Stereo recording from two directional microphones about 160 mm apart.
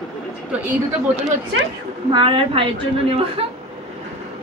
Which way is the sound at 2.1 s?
30° right (ahead or behind).